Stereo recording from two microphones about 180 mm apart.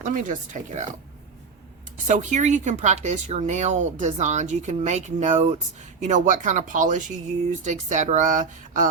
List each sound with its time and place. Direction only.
0.0 s speech: 45° right (ahead or behind)
2.0 s speech: 45° right (ahead or behind)